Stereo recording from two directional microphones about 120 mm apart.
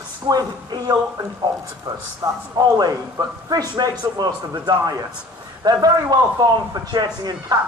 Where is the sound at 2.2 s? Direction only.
20° right (ahead or behind).